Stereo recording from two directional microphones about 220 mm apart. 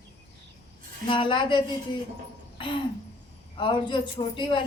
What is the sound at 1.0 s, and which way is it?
Speech, 20° left (ahead or behind).